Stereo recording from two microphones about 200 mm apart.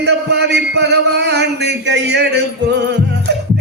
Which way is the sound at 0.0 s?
60° right (ahead or behind).